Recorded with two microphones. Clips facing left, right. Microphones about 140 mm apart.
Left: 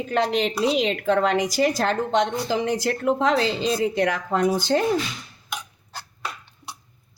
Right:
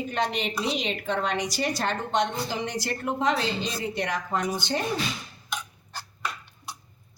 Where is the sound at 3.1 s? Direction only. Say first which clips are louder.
Left 9 dB; 90° left.